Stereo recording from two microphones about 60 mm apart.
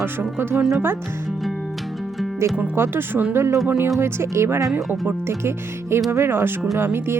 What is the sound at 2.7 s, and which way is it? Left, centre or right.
Speech, right.